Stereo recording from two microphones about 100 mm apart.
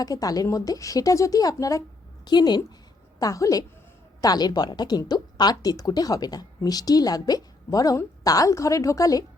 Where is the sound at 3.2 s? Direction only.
35° left (ahead or behind).